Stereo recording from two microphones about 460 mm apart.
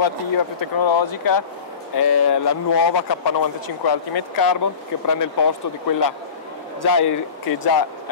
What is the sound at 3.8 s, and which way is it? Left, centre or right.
Speech, left.